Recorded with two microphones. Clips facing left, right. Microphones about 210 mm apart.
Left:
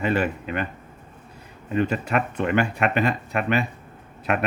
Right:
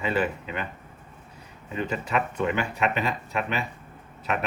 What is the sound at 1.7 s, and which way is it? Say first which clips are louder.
Speech: left 5 dB; 60° left (ahead or behind).